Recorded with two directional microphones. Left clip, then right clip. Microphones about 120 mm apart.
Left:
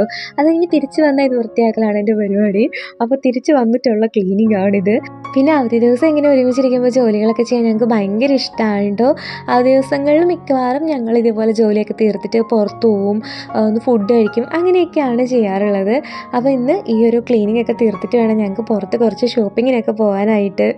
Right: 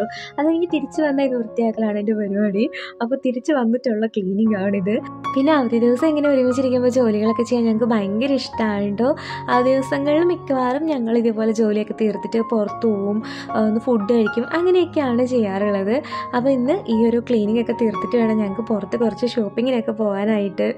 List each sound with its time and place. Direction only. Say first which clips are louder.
0.0 s a woman's voice: left 7 dB; 40° left (ahead or behind)